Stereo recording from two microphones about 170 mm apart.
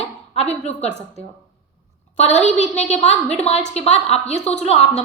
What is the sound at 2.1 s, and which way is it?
A woman's voice, 40° left (ahead or behind).